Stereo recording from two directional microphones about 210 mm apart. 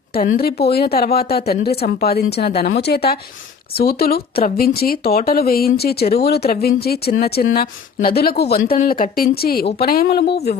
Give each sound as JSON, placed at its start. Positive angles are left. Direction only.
{"t": 0.6, "sound": "speech", "side_deg": 50}